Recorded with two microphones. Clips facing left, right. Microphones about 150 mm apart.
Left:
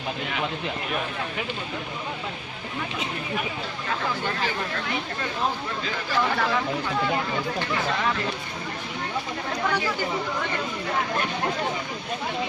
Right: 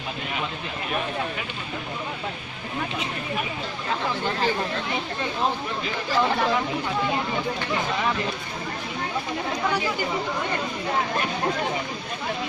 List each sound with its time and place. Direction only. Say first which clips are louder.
4.4 s speech: right 4 dB; 30° right (ahead or behind)
5.8 s speech: right 2 dB; 20° right (ahead or behind)
7.7 s speech: right 1 dB; 20° right (ahead or behind)
9.6 s speech: even; 15° right (ahead or behind)